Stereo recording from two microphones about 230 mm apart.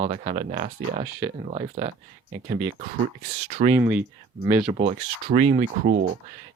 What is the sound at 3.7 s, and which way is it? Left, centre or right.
Speech, centre.